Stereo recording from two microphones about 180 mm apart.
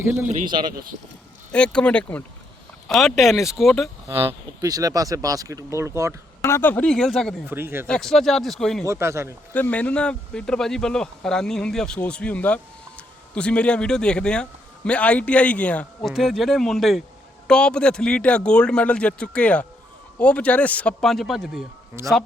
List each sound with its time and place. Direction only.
0.0 s speech: 10° right (ahead or behind)
1.5 s a man's voice: 5° left (ahead or behind)
4.2 s speech: 15° right (ahead or behind)
6.4 s speech: 10° left (ahead or behind)
7.4 s speech: 10° right (ahead or behind)
7.9 s speech: 5° left (ahead or behind)
8.9 s speech: 15° right (ahead or behind)
9.5 s a man's voice: 10° left (ahead or behind)
22.0 s speech: 15° right (ahead or behind)